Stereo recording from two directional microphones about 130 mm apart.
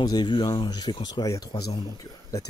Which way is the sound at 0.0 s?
35° left (ahead or behind).